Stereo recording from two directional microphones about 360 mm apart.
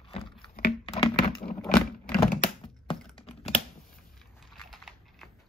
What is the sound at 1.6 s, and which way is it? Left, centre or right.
Vehicle, centre.